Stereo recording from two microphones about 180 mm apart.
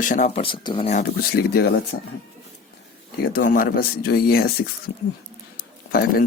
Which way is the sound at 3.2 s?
55° left (ahead or behind).